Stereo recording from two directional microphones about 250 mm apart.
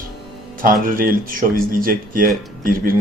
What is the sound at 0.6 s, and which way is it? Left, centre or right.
Speech, right.